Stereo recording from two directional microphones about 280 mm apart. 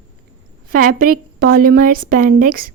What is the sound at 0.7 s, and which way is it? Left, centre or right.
A woman's voice, right.